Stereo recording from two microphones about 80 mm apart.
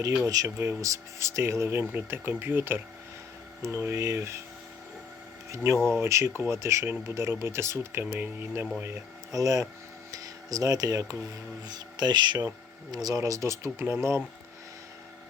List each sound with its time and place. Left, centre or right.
0.4 s speech: right
5.5 s speech: right
9.3 s speech: right
11.7 s speech: right
12.9 s speech: right